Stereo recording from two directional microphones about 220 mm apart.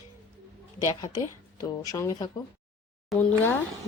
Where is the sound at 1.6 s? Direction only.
15° left (ahead or behind).